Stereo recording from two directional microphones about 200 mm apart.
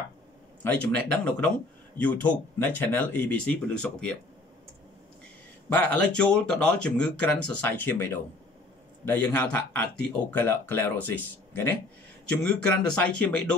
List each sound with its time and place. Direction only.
0.7 s speech: 5° left (ahead or behind)
5.7 s speech: 10° left (ahead or behind)